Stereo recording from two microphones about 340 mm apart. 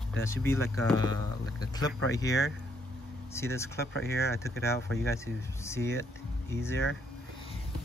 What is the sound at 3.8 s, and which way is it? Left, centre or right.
Speech, left.